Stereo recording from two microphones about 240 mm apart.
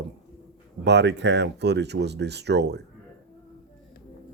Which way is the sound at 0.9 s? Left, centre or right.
Right.